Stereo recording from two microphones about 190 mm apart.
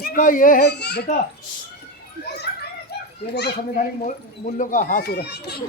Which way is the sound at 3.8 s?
40° left (ahead or behind).